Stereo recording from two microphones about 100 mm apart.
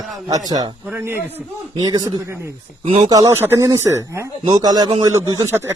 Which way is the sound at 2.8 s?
90° right.